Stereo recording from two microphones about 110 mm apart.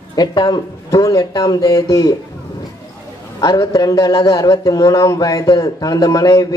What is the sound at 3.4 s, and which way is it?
Speech, 35° left (ahead or behind).